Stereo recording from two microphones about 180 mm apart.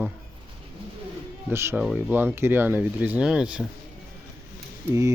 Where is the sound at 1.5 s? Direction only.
10° right (ahead or behind).